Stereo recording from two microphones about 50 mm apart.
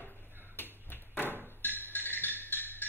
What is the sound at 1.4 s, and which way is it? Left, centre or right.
Music, left.